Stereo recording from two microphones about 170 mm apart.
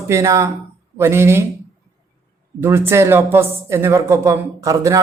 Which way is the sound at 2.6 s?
15° right (ahead or behind).